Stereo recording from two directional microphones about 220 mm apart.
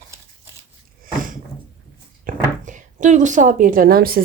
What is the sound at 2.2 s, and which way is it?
A woman's voice, 35° right (ahead or behind).